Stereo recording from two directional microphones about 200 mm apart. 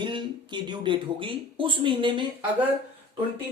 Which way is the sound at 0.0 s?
25° right (ahead or behind).